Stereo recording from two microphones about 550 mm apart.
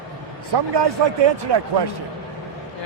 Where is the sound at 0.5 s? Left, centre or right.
Right.